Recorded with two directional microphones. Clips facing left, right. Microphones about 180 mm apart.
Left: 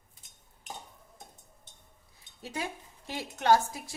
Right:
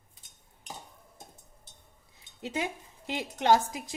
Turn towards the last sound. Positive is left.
turn(degrees=-20)  # may be behind; listen again after turning